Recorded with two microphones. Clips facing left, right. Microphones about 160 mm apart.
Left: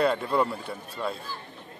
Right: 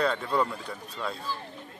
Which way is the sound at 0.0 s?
10° left (ahead or behind).